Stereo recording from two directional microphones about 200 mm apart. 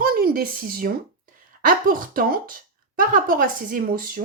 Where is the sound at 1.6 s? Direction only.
45° right (ahead or behind).